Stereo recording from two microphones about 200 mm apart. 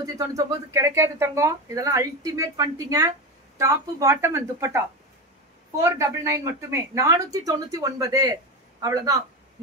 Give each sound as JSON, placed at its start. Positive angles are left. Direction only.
{"t": 0.0, "sound": "speech", "side_deg": -15}